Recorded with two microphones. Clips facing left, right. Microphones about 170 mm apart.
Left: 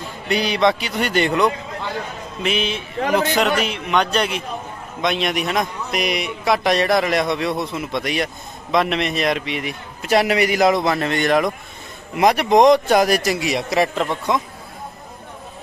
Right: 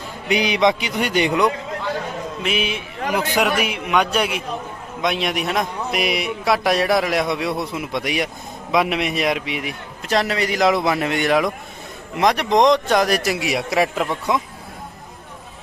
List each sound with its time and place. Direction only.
0.3 s a man's voice: 15° right (ahead or behind)
10.1 s a man's voice: 10° left (ahead or behind); by 14.4 s 5° right (ahead or behind)